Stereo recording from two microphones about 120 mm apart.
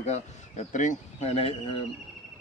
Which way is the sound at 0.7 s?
90° left.